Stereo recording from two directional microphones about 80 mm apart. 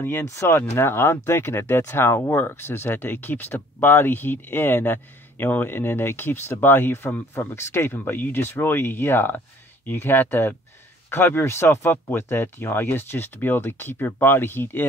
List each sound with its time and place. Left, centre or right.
0.0 s speech: left